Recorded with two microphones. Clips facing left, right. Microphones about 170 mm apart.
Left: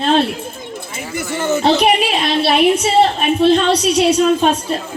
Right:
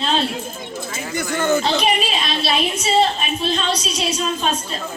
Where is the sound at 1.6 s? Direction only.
60° left (ahead or behind).